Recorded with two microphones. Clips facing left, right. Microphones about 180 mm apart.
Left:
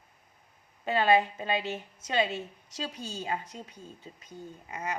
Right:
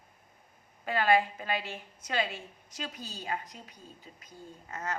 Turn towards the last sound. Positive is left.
turn(degrees=15)  # may be behind; listen again after turning